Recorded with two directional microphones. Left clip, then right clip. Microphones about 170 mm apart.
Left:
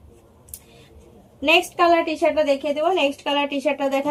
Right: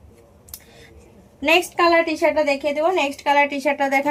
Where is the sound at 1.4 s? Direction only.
45° right (ahead or behind).